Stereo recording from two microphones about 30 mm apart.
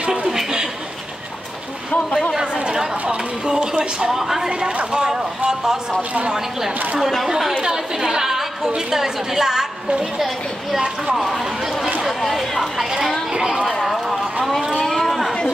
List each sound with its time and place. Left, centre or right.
0.3 s a sound: centre
2.3 s chatter: right
3.4 s speech: right
4.1 s a woman's voice: centre
4.5 s speech: right
7.2 s a woman's voice: centre
10.1 s speech: centre
11.6 s chatter: centre
12.1 s speech: centre
13.3 s a woman's voice: centre
13.8 s run: centre
14.8 s a sound: centre